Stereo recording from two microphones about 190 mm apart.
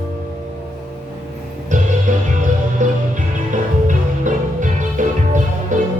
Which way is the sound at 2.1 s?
40° right (ahead or behind).